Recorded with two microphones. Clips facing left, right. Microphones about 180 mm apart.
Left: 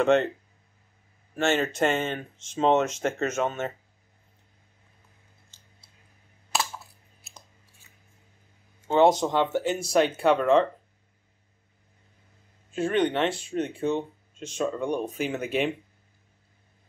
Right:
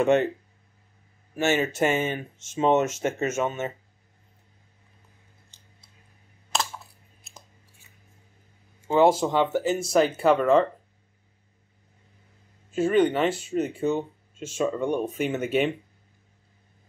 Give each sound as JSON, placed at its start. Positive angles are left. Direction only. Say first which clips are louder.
{"t": 0.0, "sound": "speech", "louder": "right 1 dB", "side_deg": -10}
{"t": 1.3, "sound": "speech", "louder": "right 1 dB", "side_deg": -5}
{"t": 5.5, "sound": "a sound", "louder": "right 1 dB", "side_deg": -15}
{"t": 8.8, "sound": "speech", "louder": "even", "side_deg": -5}
{"t": 12.7, "sound": "speech", "louder": "right 3 dB", "side_deg": 0}